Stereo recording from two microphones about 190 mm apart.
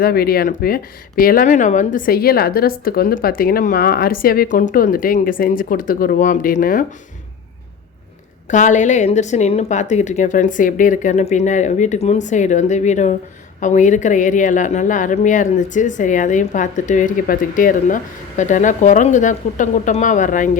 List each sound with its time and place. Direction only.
0.0 s speech: 55° left (ahead or behind)
8.4 s a woman's voice: 40° left (ahead or behind)